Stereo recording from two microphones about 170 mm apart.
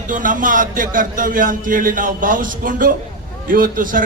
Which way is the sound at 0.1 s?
50° right (ahead or behind).